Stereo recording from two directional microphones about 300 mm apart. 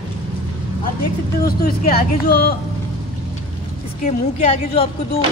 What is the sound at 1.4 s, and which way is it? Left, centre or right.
Speech, left.